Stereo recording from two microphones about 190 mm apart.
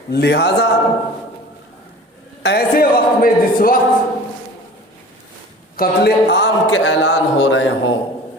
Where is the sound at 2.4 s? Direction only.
55° left (ahead or behind).